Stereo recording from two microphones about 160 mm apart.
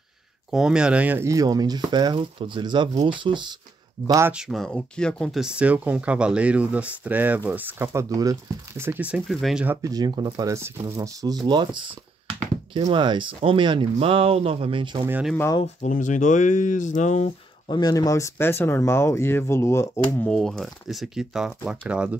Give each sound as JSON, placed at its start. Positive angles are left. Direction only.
{"t": 0.5, "sound": "speech", "side_deg": -5}
{"t": 4.3, "sound": "speech", "side_deg": 0}
{"t": 9.8, "sound": "speech", "side_deg": -25}
{"t": 12.9, "sound": "speech", "side_deg": -30}
{"t": 15.0, "sound": "speech", "side_deg": -10}
{"t": 15.6, "sound": "speech", "side_deg": 50}
{"t": 17.6, "sound": "speech", "side_deg": 25}
{"t": 20.2, "sound": "speech", "side_deg": 0}